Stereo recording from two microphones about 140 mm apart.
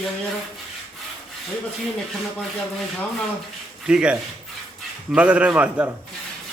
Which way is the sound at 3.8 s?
5° right (ahead or behind).